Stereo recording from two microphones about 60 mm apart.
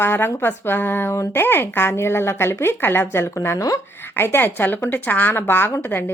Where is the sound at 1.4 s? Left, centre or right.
Left.